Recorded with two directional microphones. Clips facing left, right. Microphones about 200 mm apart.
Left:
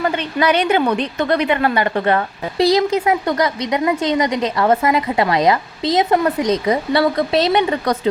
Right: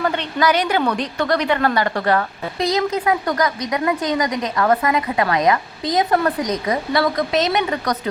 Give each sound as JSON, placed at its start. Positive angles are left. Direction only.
{"t": 0.0, "sound": "a woman's voice", "side_deg": 15}
{"t": 2.6, "sound": "a woman's voice", "side_deg": 30}